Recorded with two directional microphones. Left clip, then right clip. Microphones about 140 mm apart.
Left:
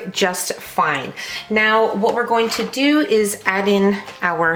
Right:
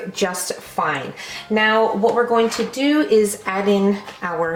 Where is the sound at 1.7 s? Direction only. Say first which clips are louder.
Even; 25° left (ahead or behind).